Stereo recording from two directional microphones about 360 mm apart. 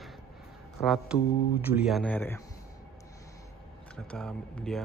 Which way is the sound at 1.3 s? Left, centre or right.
Left.